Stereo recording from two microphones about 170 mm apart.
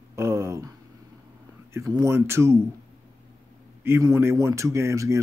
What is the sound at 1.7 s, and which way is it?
Speech, 20° right (ahead or behind).